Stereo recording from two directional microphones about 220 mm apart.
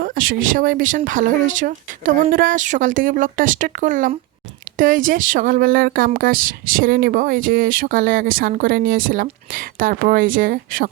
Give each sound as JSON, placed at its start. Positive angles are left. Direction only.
{"t": 0.0, "sound": "speech", "side_deg": -40}